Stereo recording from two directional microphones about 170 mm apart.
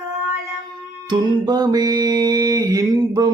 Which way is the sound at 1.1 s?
25° right (ahead or behind).